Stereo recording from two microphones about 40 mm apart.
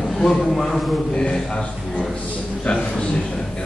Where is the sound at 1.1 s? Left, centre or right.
Left.